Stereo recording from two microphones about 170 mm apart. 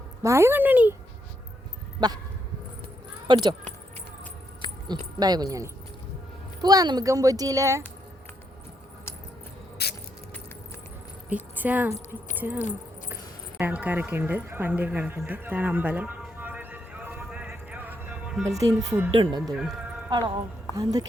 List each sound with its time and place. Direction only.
0.2 s speech: 15° right (ahead or behind)
2.0 s speech: 25° right (ahead or behind)
3.2 s speech: 25° right (ahead or behind)
4.9 s speech: 25° right (ahead or behind)
9.8 s keys jangling: 70° left (ahead or behind)
11.3 s speech: 10° right (ahead or behind)
13.6 s a sound: 10° right (ahead or behind)
18.4 s speech: 20° right (ahead or behind)
19.1 s speech: 30° right (ahead or behind)